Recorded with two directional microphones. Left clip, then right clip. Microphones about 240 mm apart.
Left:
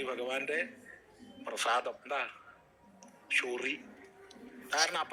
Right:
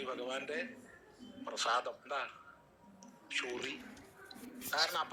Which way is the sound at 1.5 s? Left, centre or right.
Left.